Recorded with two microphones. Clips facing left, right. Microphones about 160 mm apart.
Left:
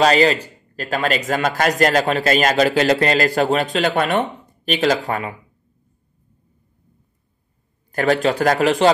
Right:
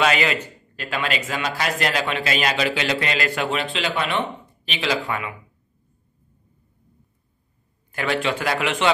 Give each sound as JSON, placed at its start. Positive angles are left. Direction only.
{"t": 0.0, "sound": "a man's voice", "side_deg": 35}
{"t": 7.9, "sound": "speech", "side_deg": 45}